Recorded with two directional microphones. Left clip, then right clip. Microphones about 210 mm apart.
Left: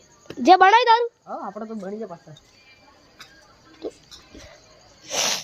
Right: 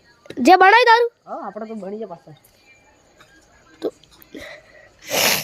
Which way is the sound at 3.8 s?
35° right (ahead or behind).